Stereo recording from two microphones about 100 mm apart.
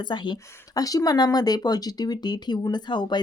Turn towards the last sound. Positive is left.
turn(degrees=50)  # may be behind; listen again after turning